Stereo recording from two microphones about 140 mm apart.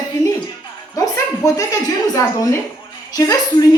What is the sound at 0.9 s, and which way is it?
A woman's voice, 25° left (ahead or behind).